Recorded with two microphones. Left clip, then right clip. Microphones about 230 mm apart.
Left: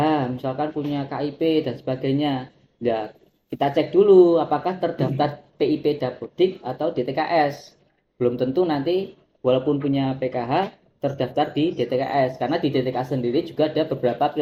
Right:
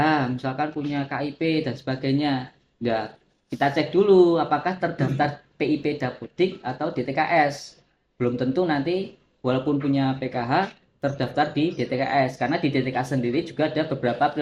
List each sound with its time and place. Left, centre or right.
0.0 s speech: right
3.5 s speech: right